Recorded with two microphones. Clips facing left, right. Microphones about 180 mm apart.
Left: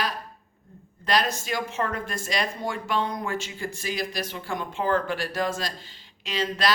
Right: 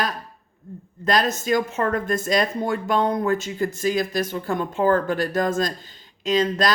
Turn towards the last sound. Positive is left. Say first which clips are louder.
# right 6 dB
turn(degrees=-45)  # may be behind; listen again after turning